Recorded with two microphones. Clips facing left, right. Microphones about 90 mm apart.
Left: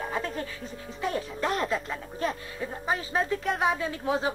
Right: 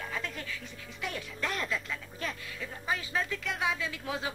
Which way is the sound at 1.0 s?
35° left (ahead or behind).